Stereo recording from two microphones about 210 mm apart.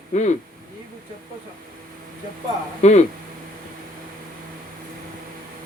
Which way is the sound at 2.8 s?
30° left (ahead or behind).